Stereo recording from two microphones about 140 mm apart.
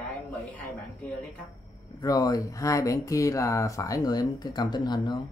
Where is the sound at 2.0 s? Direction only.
25° left (ahead or behind).